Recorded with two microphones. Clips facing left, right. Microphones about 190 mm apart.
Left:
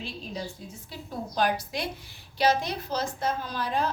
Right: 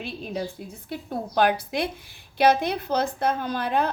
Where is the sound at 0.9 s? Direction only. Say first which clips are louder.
Right 6 dB; 60° right (ahead or behind).